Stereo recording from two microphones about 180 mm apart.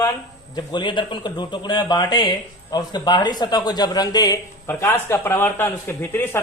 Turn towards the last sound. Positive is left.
turn(degrees=10)  # may be behind; listen again after turning